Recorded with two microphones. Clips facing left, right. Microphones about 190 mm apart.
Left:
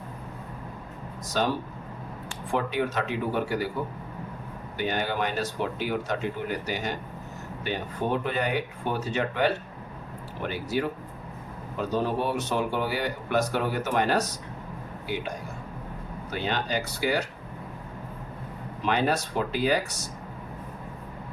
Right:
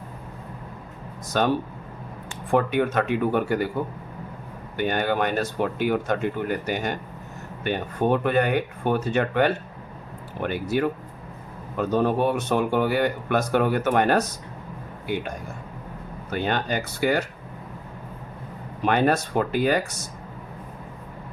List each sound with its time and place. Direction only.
1.3 s speech: 55° right (ahead or behind)
4.8 s speech: 55° right (ahead or behind)
16.3 s speech: 55° right (ahead or behind)
18.8 s speech: 55° right (ahead or behind)